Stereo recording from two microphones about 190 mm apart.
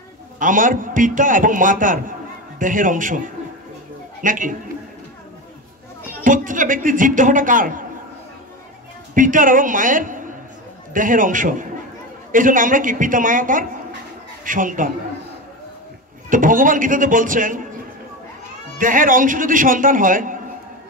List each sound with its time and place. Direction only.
0.4 s a man's voice: 45° right (ahead or behind)
4.2 s a man's voice: 45° right (ahead or behind)
6.2 s a man's voice: 45° right (ahead or behind)
9.1 s a man's voice: 45° right (ahead or behind)
16.3 s a man's voice: 45° right (ahead or behind)
18.8 s a man's voice: 45° right (ahead or behind)